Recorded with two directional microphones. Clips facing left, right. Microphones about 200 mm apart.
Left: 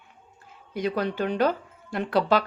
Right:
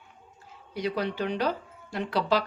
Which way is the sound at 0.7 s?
50° left (ahead or behind).